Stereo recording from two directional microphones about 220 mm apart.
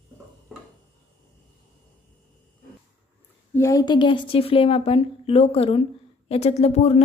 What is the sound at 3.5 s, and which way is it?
A woman's voice, 15° left (ahead or behind).